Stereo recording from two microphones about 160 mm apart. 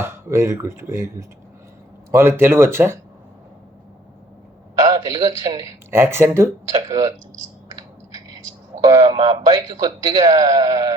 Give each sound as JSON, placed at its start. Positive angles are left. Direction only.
{"t": 0.0, "sound": "speech", "side_deg": -15}
{"t": 2.1, "sound": "speech", "side_deg": -15}
{"t": 4.9, "sound": "a man's voice", "side_deg": -25}
{"t": 8.8, "sound": "a man's voice", "side_deg": -25}